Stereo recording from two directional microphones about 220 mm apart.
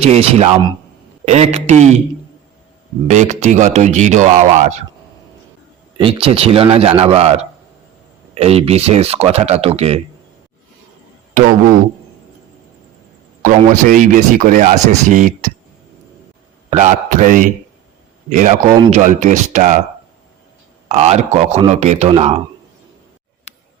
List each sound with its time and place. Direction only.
0.0 s speech: 30° right (ahead or behind)
3.1 s speech: 30° right (ahead or behind)
6.0 s speech: 25° right (ahead or behind)
13.4 s speech: 35° right (ahead or behind)
16.6 s speech: 30° right (ahead or behind)
20.8 s speech: 30° right (ahead or behind)
23.5 s a sound: 30° left (ahead or behind)